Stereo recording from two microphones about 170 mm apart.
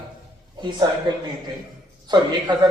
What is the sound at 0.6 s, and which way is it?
Speech, 25° right (ahead or behind).